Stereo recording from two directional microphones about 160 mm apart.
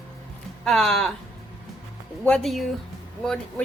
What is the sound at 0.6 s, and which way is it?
Speech, 5° left (ahead or behind).